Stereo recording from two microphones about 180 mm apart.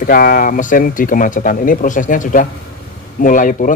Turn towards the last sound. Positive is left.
turn(degrees=45)  # may be behind; listen again after turning